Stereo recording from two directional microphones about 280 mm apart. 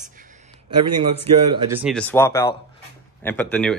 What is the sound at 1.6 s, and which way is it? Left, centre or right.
Speech, centre.